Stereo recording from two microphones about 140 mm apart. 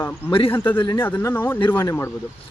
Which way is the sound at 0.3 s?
40° left (ahead or behind).